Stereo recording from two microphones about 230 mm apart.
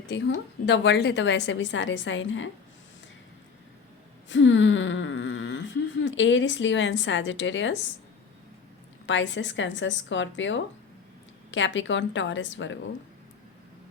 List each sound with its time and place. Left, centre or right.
0.1 s a woman's voice: left
4.3 s speech: left
9.0 s a woman's voice: left